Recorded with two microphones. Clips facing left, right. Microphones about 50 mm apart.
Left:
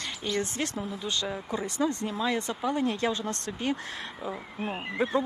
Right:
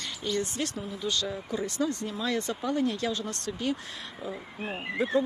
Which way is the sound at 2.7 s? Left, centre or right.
Left.